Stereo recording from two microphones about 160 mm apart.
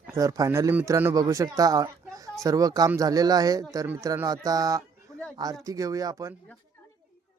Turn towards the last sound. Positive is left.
turn(degrees=-20)  # may be behind; listen again after turning